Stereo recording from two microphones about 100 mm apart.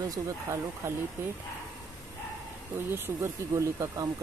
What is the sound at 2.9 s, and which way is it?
Speech, 30° right (ahead or behind).